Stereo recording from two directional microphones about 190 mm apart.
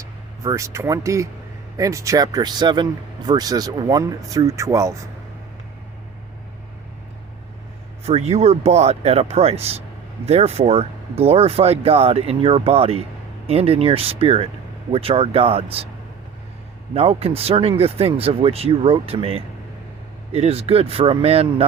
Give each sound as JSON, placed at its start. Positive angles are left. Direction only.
{"t": 0.0, "sound": "speech", "side_deg": -15}
{"t": 8.0, "sound": "speech", "side_deg": -35}
{"t": 16.9, "sound": "speech", "side_deg": -30}